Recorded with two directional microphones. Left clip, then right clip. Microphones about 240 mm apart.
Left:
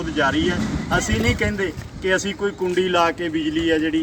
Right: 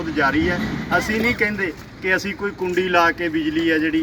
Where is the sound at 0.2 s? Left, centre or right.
Centre.